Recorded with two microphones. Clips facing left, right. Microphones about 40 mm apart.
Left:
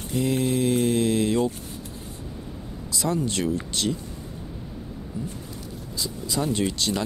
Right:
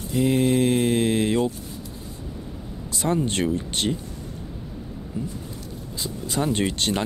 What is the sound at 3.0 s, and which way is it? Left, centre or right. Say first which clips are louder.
Speech: right 2 dB; right.